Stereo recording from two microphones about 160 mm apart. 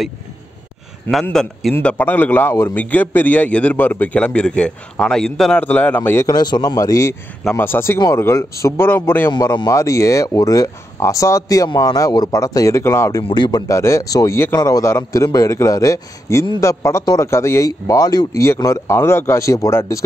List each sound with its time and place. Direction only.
1.2 s a man's voice: 5° left (ahead or behind)
6.2 s a man's voice: 25° left (ahead or behind)
9.3 s speech: 25° left (ahead or behind)
13.3 s speech: 30° left (ahead or behind)